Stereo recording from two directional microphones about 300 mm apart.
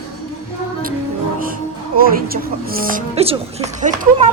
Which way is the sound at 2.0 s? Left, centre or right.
Right.